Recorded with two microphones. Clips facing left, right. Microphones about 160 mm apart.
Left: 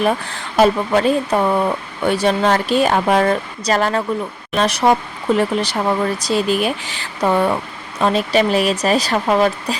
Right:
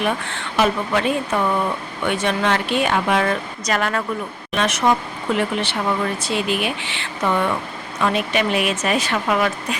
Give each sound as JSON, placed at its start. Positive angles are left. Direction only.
{"t": 0.0, "sound": "speech", "side_deg": 35}